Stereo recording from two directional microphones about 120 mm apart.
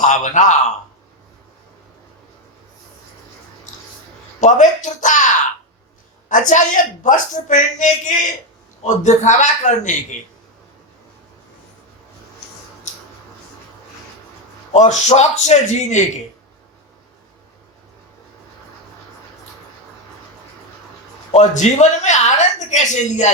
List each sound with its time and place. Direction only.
0.0 s a man's voice: 90° left
4.4 s a woman's voice: 85° left
14.7 s a woman's voice: 75° left (ahead or behind)
21.3 s a woman's voice: 80° left